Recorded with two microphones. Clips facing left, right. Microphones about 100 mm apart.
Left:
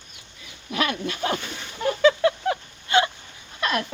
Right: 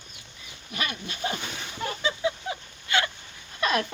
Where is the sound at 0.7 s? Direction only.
90° left; by 2.6 s 75° left (ahead or behind).